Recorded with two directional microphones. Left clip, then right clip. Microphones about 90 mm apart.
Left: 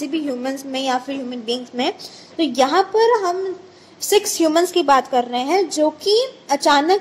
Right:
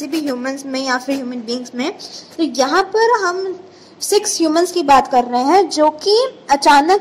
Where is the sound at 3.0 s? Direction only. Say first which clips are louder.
Right 2 dB; 45° left (ahead or behind).